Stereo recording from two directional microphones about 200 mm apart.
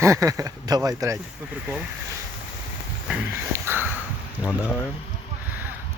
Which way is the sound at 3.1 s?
10° right (ahead or behind).